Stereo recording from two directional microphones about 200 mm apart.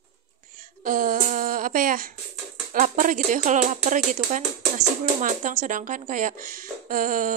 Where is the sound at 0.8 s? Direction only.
45° right (ahead or behind).